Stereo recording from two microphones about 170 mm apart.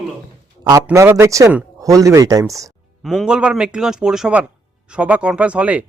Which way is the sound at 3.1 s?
Centre (ahead or behind).